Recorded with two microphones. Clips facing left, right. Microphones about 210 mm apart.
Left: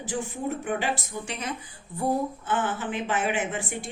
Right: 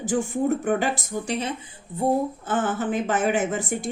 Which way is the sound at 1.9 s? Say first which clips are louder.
Right 4 dB; 20° right (ahead or behind).